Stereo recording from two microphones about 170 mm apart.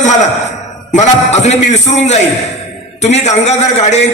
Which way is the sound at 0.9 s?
40° left (ahead or behind).